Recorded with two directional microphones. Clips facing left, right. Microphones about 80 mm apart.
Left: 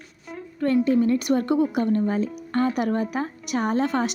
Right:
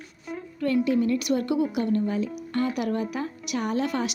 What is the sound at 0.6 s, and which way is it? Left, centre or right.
A woman's voice, left.